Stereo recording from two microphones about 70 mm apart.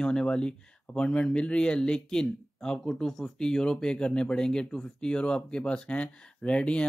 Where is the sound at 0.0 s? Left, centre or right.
Centre.